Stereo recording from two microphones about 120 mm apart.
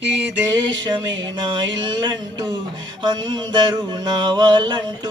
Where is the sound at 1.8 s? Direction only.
35° right (ahead or behind).